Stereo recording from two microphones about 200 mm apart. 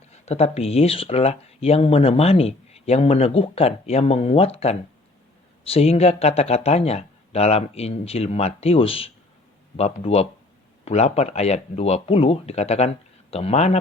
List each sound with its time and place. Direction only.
0.1 s speech: 30° left (ahead or behind)